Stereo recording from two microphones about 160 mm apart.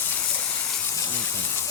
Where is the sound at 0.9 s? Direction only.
20° left (ahead or behind).